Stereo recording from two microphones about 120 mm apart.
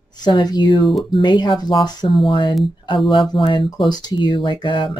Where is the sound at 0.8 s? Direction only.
Centre (ahead or behind).